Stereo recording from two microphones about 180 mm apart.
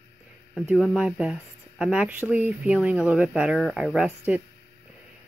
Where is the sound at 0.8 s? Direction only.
Centre (ahead or behind).